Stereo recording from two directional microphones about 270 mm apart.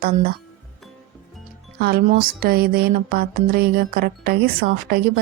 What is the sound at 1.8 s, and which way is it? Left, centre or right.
Music, right.